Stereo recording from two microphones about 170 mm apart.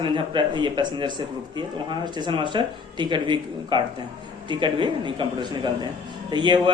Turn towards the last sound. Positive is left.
turn(degrees=-25)  # may be behind; listen again after turning